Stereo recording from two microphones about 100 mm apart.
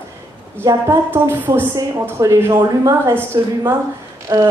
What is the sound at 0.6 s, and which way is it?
Music, 30° right (ahead or behind).